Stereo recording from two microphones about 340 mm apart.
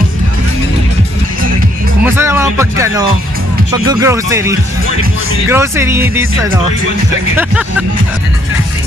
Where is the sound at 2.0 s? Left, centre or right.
Centre.